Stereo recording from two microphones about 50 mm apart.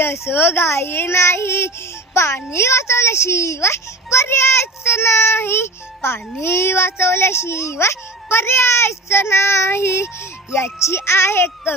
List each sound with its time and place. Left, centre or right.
0.0 s speech: left